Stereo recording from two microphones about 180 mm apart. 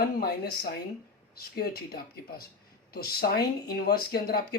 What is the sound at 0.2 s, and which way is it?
Speech, 60° left (ahead or behind).